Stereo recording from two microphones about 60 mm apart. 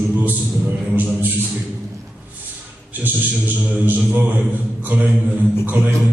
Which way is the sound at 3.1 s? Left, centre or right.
Right.